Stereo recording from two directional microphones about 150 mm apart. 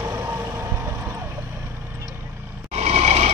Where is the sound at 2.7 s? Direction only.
45° right (ahead or behind).